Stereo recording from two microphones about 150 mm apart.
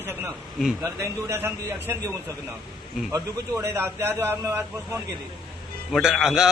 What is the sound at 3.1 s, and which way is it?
A man's voice, 20° right (ahead or behind).